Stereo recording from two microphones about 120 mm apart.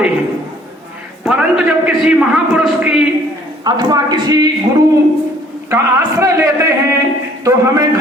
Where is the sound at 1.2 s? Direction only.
5° right (ahead or behind).